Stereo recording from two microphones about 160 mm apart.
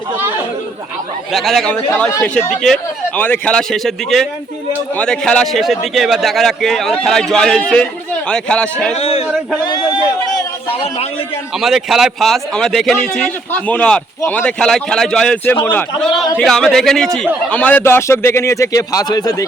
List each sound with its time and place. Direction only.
1.3 s a man's voice: centre (ahead or behind)
2.5 s a man's voice: 5° left (ahead or behind)
9.0 s a man's voice: 40° left (ahead or behind)
10.8 s a man's voice: 40° left (ahead or behind)
11.5 s a man's voice: centre (ahead or behind); by 19.5 s 25° left (ahead or behind)